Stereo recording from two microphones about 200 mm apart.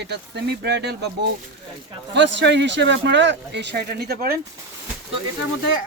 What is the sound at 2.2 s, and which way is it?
Speech, 60° right (ahead or behind).